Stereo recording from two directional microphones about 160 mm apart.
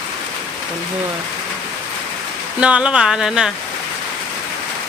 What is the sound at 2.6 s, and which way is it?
Speech, 5° right (ahead or behind).